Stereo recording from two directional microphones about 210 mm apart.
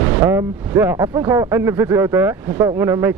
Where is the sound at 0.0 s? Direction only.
15° right (ahead or behind).